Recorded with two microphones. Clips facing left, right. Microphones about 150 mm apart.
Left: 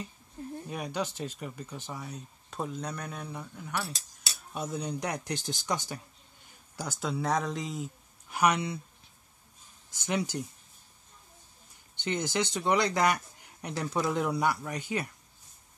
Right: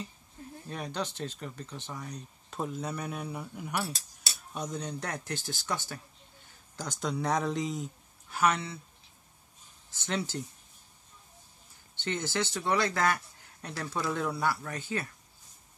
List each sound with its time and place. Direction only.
0.7 s speech: 10° left (ahead or behind); by 3.9 s 10° right (ahead or behind)
4.5 s speech: 5° left (ahead or behind)
6.8 s speech: 5° left (ahead or behind)
8.3 s speech: 15° left (ahead or behind)
9.8 s speech: 15° left (ahead or behind)
11.9 s speech: 15° left (ahead or behind)